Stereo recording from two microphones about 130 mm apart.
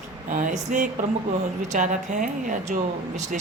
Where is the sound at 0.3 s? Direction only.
90° right; by 0.9 s 75° right (ahead or behind).